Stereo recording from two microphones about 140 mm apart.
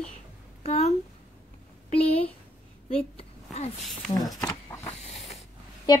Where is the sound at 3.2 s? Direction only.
50° left (ahead or behind).